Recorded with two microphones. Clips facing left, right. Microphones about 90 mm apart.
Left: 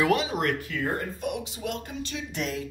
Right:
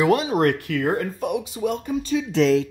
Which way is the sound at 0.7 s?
80° right.